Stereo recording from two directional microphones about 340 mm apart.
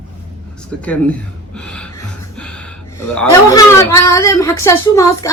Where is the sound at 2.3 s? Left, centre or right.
Centre.